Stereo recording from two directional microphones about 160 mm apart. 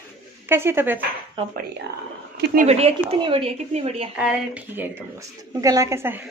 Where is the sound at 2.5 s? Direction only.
45° right (ahead or behind).